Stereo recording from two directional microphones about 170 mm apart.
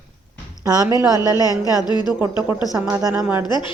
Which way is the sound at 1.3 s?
20° left (ahead or behind).